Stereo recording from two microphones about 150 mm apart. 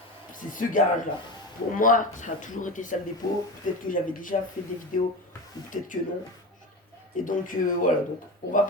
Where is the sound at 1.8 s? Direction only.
60° left (ahead or behind).